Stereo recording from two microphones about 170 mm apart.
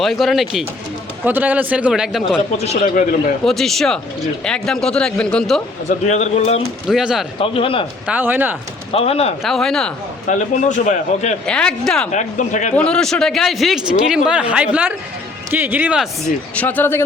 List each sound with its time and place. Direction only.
0.0 s a man's voice: centre (ahead or behind)
2.8 s a man's voice: 50° left (ahead or behind)
3.4 s speech: centre (ahead or behind)
6.1 s speech: 40° left (ahead or behind)
6.8 s speech: 5° right (ahead or behind)
7.3 s speech: 30° left (ahead or behind)
8.0 s a man's voice: 10° right (ahead or behind)
8.9 s speech: 35° left (ahead or behind)
9.4 s speech: centre (ahead or behind)
10.2 s a man's voice: 45° left (ahead or behind)
11.4 s speech: 5° left (ahead or behind)
12.1 s a man's voice: 45° left (ahead or behind)
12.7 s a man's voice: 5° left (ahead or behind)
16.6 s speech: 10° left (ahead or behind)